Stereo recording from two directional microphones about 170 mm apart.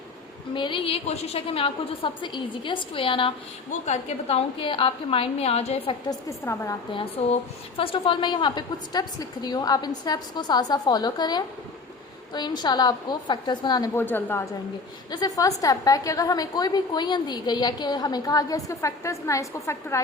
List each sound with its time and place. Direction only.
0.5 s a woman's voice: 30° left (ahead or behind)
6.1 s a woman's voice: 20° left (ahead or behind)
6.9 s a woman's voice: 35° left (ahead or behind)
14.0 s a woman's voice: 10° left (ahead or behind)
15.1 s a woman's voice: 20° left (ahead or behind)